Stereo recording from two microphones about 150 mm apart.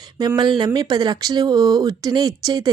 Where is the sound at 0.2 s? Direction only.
30° right (ahead or behind).